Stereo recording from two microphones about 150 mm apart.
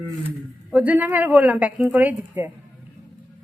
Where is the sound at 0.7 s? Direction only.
10° right (ahead or behind).